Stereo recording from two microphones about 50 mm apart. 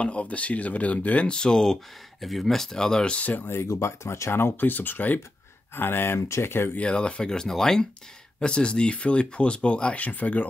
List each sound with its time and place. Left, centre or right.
0.0 s speech: left
1.3 s speech: centre
3.2 s speech: left
3.6 s speech: left
4.3 s speech: left
5.8 s speech: left
6.2 s speech: left
6.8 s speech: left